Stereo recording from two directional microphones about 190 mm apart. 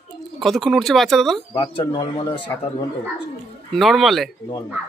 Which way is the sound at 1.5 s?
25° left (ahead or behind).